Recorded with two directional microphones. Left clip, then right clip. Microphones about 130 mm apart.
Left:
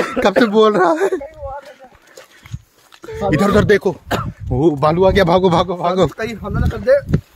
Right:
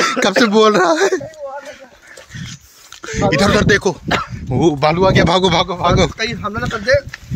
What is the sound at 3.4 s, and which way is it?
Speech, 25° left (ahead or behind).